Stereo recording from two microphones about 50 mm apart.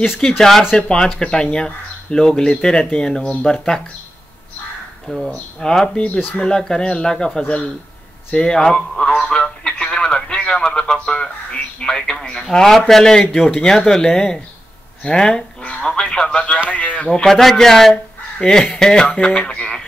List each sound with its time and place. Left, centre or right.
0.4 s speech: centre
0.7 s speech: centre
5.1 s speech: centre
6.0 s speech: left
6.4 s speech: centre
8.4 s a man's voice: centre
16.7 s speech: left
17.1 s speech: centre; by 19.7 s left